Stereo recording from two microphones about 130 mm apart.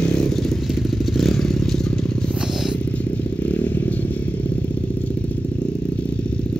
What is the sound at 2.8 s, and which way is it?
Vehicle, 10° left (ahead or behind).